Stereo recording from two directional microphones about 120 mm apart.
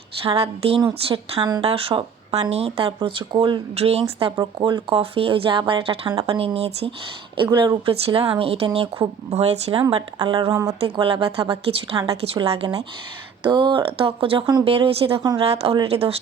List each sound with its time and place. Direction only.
0.2 s speech: 50° right (ahead or behind)
1.0 s a woman's voice: 40° right (ahead or behind)
1.6 s speech: 50° right (ahead or behind)
4.4 s speech: 40° right (ahead or behind); by 6.9 s 60° right (ahead or behind)
7.3 s speech: 45° right (ahead or behind)
9.3 s speech: 60° right (ahead or behind)
9.9 s speech: 50° right (ahead or behind)
10.4 s speech: 25° right (ahead or behind)
10.8 s speech: 50° right (ahead or behind)
13.4 s speech: 40° right (ahead or behind)